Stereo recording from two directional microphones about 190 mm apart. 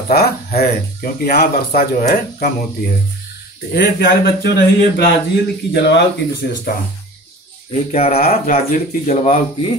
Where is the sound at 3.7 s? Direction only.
60° left (ahead or behind).